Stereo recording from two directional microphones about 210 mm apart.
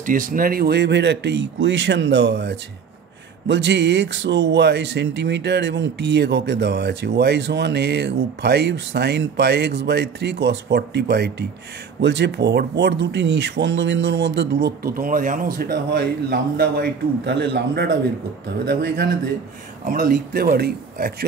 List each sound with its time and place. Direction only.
0.0 s speech: 40° right (ahead or behind)